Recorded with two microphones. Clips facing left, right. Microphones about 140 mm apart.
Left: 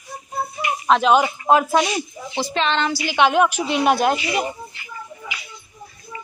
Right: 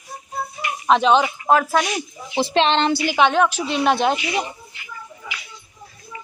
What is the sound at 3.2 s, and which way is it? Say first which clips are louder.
A woman's voice: left 2 dB; 10° left (ahead or behind).